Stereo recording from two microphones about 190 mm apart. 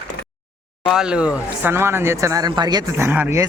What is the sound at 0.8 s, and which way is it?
Speech, 5° right (ahead or behind).